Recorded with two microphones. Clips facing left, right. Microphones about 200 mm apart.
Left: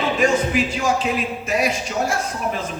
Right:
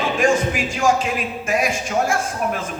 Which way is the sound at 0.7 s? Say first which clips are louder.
Right 2 dB; 45° right (ahead or behind).